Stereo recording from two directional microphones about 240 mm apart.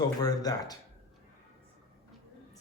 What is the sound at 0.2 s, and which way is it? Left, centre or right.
Speech, centre.